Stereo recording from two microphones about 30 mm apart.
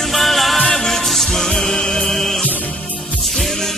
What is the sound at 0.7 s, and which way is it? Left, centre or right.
Music, centre.